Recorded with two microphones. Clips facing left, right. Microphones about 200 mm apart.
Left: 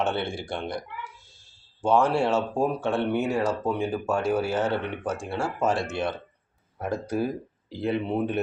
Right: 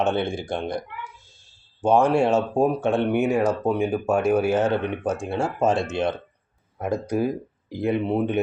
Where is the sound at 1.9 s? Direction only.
15° right (ahead or behind).